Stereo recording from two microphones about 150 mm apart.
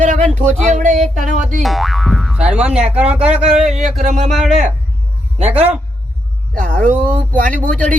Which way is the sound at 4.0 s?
55° right (ahead or behind).